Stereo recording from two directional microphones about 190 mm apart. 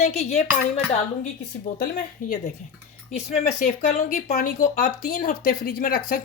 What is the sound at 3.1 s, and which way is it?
Speech, 35° left (ahead or behind).